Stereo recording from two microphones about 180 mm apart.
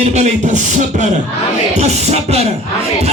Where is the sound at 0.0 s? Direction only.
40° right (ahead or behind).